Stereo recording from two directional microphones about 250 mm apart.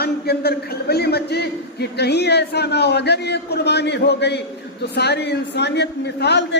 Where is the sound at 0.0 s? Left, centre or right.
Left.